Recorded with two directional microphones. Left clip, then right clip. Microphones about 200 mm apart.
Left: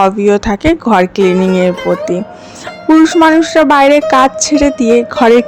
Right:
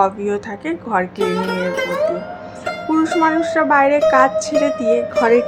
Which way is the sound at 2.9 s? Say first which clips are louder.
Left 9 dB; 40° left (ahead or behind).